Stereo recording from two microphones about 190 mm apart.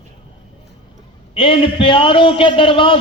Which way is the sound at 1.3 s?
30° left (ahead or behind).